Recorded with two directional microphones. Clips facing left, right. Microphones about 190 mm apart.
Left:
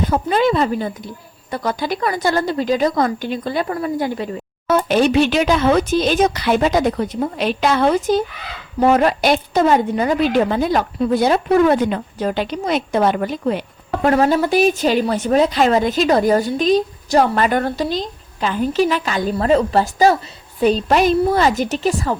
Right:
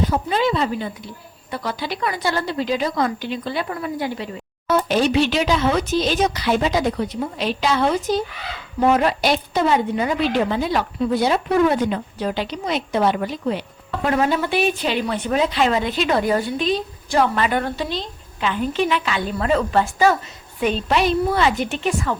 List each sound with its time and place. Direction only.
0.1 s a woman's voice: 50° left (ahead or behind)
4.7 s a woman's voice: 55° left (ahead or behind); by 22.1 s 40° left (ahead or behind)